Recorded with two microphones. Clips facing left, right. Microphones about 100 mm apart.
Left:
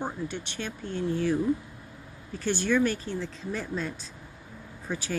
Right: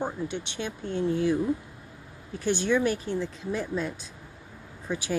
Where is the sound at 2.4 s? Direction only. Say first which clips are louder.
Right 1 dB; 15° right (ahead or behind).